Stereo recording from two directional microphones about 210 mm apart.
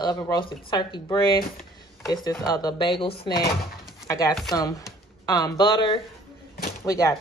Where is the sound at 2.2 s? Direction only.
20° left (ahead or behind).